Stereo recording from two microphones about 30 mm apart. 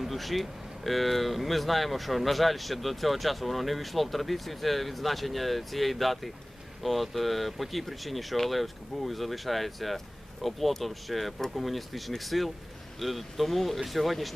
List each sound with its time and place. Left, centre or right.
0.0 s speech: centre